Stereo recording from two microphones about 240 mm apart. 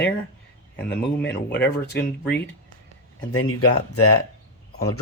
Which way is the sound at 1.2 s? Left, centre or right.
Centre.